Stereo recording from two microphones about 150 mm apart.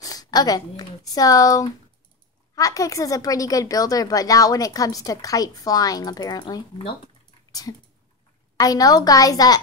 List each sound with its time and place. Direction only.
0.0 s a woman's voice: 25° left (ahead or behind)
7.7 s a woman's voice: 25° left (ahead or behind)